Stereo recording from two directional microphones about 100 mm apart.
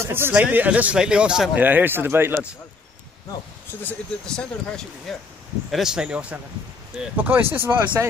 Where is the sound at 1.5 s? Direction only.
20° right (ahead or behind).